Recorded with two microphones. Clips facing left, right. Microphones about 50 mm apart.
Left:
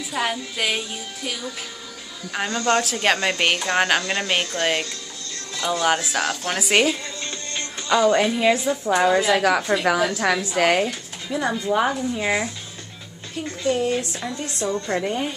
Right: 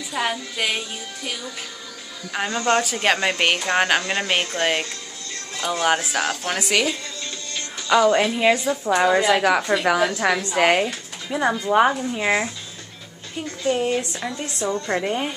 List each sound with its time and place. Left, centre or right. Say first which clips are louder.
0.1 s a woman's voice: even; centre
2.4 s a woman's voice: even; right
2.8 s a woman's voice: even; centre
3.2 s a woman's voice: right 1 dB; centre
5.5 s music: left 1 dB; right
6.1 s a woman's voice: even; right
7.9 s a woman's voice: right 1 dB; centre
13.7 s a woman's voice: even; right